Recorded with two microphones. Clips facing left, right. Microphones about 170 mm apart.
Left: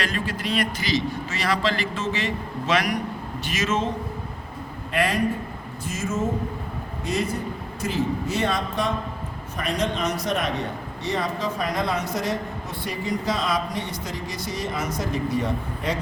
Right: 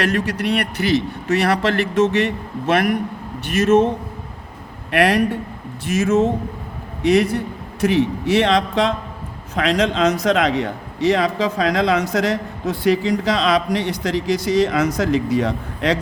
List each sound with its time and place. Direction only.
0.0 s a man's voice: 70° right (ahead or behind); by 16.0 s 90° right